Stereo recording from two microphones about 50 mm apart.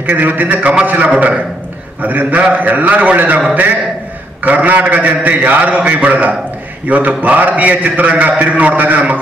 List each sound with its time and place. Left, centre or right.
0.0 s a man's voice: right